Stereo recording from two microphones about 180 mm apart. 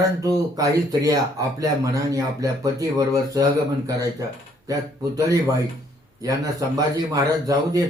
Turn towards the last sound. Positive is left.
turn(degrees=-20)  # may be behind; listen again after turning